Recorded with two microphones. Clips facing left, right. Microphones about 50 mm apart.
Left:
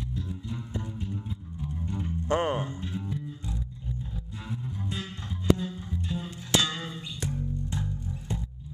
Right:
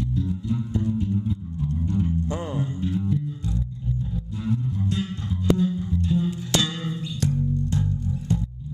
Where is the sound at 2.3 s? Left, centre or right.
Left.